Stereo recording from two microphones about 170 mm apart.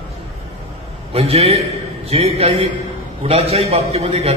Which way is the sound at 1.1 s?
35° right (ahead or behind).